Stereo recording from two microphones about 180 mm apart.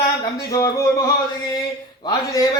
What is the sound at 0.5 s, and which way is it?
Speech, 15° left (ahead or behind).